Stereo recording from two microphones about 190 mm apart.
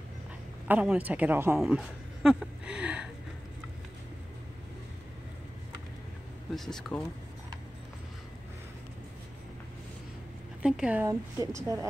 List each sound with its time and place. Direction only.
0.7 s speech: 10° right (ahead or behind)
6.5 s speech: centre (ahead or behind)
10.6 s a woman's voice: 5° right (ahead or behind)